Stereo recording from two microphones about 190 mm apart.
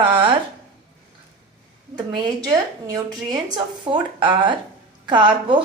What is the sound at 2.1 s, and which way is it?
A woman's voice, 20° right (ahead or behind).